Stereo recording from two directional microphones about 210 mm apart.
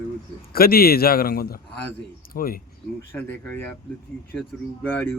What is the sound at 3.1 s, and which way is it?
A man's voice, 10° left (ahead or behind).